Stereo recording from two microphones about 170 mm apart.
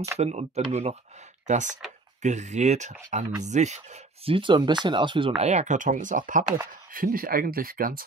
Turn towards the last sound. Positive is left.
turn(degrees=-55)  # may be behind; listen again after turning